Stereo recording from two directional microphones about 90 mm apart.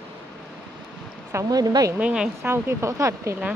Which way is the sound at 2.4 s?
25° right (ahead or behind).